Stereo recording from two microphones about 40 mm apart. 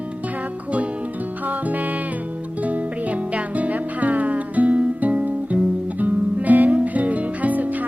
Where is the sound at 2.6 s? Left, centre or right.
Right.